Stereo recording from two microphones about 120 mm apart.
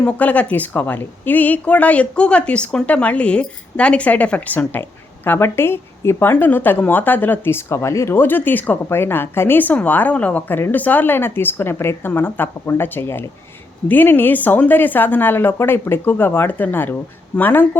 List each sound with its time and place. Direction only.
0.0 s a woman's voice: 15° left (ahead or behind)